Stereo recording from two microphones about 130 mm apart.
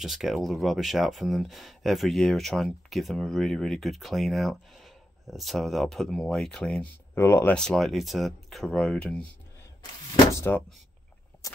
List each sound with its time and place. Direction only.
0.0 s speech: centre (ahead or behind)
7.2 s speech: 20° left (ahead or behind)
7.5 s speech: 5° left (ahead or behind)
10.3 s speech: 15° left (ahead or behind)
11.4 s a sound: 25° left (ahead or behind)